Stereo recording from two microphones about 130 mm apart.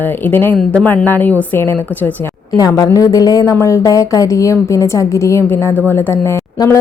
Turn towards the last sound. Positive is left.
turn(degrees=25)  # may be behind; listen again after turning